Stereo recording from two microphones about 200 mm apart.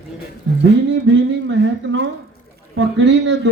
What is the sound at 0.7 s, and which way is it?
Speech, 65° right (ahead or behind).